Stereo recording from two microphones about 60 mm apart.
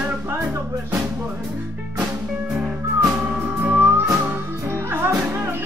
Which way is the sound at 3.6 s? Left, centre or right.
Right.